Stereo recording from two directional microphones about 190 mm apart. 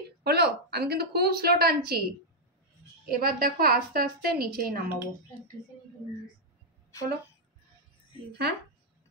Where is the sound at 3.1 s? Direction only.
50° right (ahead or behind).